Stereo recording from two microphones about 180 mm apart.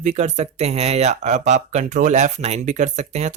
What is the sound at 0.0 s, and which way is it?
Speech, 40° right (ahead or behind).